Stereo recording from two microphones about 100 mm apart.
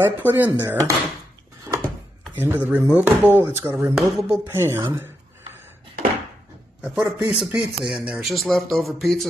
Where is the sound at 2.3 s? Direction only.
20° right (ahead or behind).